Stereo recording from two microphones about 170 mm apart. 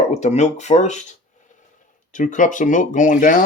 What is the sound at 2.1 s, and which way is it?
Speech, 45° left (ahead or behind).